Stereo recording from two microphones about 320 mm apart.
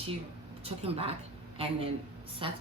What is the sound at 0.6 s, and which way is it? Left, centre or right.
Speech, centre.